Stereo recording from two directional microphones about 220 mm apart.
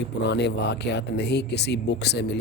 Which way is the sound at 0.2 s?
50° left (ahead or behind).